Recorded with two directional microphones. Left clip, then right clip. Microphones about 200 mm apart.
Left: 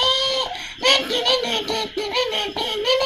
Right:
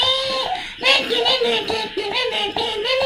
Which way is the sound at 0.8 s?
35° left (ahead or behind).